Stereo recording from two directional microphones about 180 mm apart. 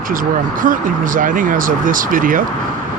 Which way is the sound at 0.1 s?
50° right (ahead or behind).